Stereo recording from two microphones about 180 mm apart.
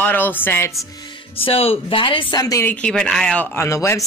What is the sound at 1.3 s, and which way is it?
A woman's voice, 30° left (ahead or behind).